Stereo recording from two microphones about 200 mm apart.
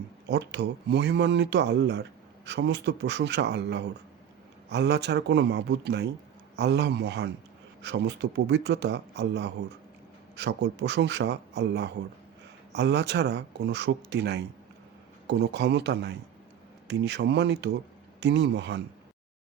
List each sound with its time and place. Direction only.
0.3 s speech: 55° right (ahead or behind)